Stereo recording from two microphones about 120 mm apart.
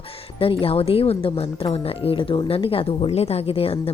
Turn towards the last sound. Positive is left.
turn(degrees=55)  # may be behind; listen again after turning